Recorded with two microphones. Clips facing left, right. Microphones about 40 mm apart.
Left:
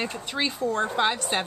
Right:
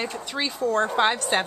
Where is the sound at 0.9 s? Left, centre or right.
Centre.